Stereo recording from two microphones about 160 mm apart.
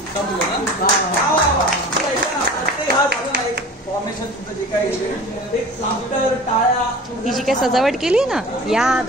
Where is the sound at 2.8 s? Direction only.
75° right (ahead or behind).